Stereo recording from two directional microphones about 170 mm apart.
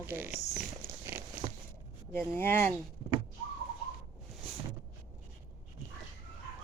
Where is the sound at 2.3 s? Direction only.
15° left (ahead or behind).